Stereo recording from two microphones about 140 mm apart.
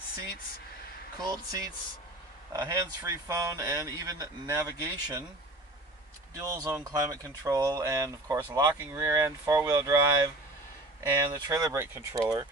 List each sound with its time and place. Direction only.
1.2 s speech: 25° right (ahead or behind)
6.3 s speech: 25° right (ahead or behind)
11.0 s speech: 25° right (ahead or behind)